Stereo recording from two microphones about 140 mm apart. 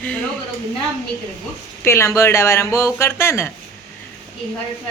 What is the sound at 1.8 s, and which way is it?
Speech, 20° left (ahead or behind).